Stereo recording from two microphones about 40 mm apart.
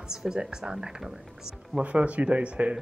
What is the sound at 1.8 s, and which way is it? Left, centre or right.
Speech, right.